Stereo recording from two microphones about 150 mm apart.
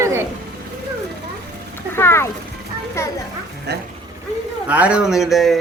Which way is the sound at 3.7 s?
90° right.